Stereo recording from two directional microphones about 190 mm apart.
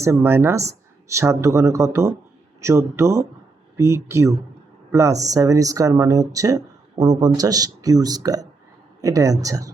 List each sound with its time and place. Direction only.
0.0 s speech: 15° right (ahead or behind)